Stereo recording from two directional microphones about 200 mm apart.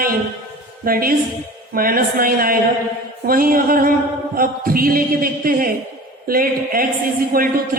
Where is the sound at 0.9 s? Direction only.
45° right (ahead or behind).